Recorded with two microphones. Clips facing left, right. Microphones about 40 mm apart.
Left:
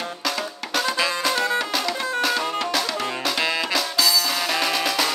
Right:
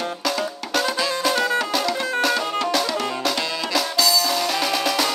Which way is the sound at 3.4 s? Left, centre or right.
Left.